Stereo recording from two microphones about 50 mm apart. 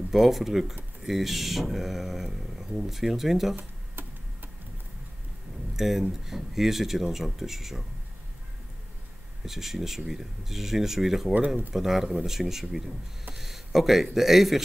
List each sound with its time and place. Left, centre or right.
0.1 s speech: centre
3.5 s tick-tock: right
5.8 s speech: centre
9.4 s speech: centre